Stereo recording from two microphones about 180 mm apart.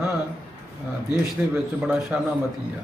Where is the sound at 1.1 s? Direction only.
5° right (ahead or behind).